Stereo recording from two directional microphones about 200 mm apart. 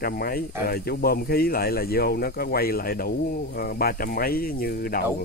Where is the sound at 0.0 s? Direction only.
45° left (ahead or behind).